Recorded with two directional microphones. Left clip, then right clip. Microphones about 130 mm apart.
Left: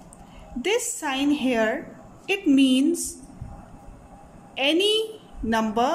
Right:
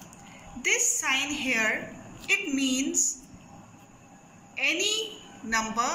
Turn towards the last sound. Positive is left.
turn(degrees=70)  # may be behind; listen again after turning